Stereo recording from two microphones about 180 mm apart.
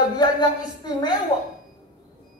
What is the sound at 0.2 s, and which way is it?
Speech, 25° left (ahead or behind).